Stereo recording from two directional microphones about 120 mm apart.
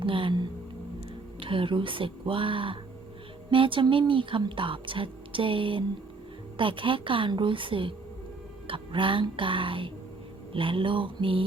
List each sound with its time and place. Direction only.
0.0 s speech: 45° right (ahead or behind)